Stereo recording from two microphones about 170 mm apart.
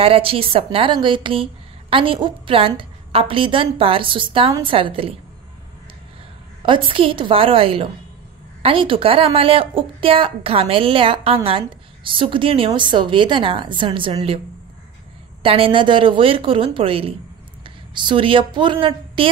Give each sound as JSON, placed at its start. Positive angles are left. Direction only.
{"t": 0.0, "sound": "a woman's voice", "side_deg": -35}
{"t": 6.6, "sound": "a woman's voice", "side_deg": -30}
{"t": 15.4, "sound": "a woman's voice", "side_deg": -35}